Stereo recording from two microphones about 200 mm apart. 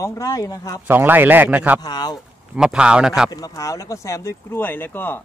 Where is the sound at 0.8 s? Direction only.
10° right (ahead or behind).